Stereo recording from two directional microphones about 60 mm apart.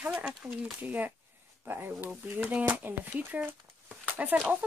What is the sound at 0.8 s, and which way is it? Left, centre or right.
Speech, right.